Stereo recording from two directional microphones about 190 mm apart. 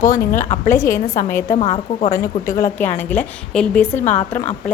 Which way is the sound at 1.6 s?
35° left (ahead or behind).